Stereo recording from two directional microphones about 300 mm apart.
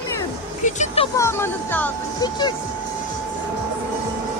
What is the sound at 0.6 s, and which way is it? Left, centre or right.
Music, left.